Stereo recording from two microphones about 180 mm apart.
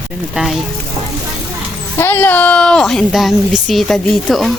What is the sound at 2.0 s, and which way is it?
Speech, 10° left (ahead or behind).